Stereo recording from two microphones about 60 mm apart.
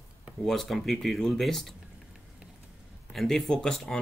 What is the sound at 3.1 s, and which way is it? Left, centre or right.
Speech, centre.